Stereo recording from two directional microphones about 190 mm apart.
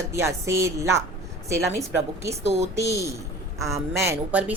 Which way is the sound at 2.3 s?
35° right (ahead or behind).